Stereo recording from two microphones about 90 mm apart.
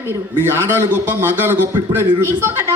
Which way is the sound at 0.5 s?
25° right (ahead or behind).